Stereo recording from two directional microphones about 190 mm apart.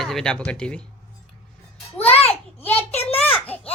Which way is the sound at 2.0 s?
30° left (ahead or behind).